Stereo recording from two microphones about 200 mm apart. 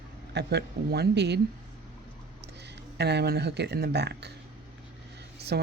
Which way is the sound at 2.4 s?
55° right (ahead or behind).